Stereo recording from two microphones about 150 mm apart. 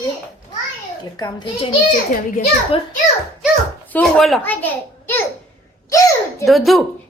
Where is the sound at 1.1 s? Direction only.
25° left (ahead or behind).